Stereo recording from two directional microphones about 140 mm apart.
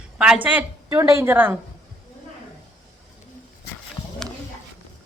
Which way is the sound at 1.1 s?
20° right (ahead or behind).